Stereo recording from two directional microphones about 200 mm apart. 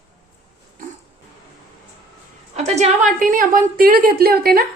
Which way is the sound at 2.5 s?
35° right (ahead or behind).